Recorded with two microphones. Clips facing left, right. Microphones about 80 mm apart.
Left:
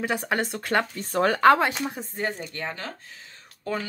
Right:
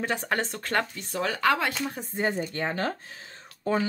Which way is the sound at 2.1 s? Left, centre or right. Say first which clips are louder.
Right 6 dB; centre.